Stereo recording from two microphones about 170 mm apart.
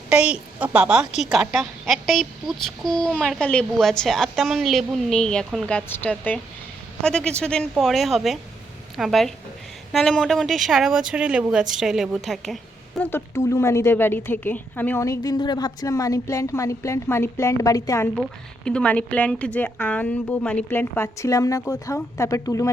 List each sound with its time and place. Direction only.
0.1 s a woman's voice: 5° right (ahead or behind)
13.0 s a woman's voice: 10° left (ahead or behind)
18.2 s a woman's voice: 5° left (ahead or behind)